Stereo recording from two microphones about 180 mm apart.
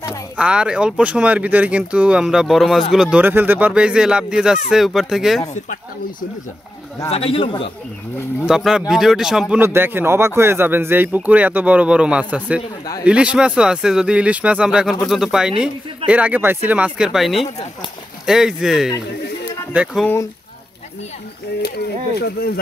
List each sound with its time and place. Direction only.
0.4 s speech: 5° right (ahead or behind)
7.1 s a man's voice: 30° left (ahead or behind)
8.5 s a man's voice: centre (ahead or behind)
21.6 s speech: 65° left (ahead or behind)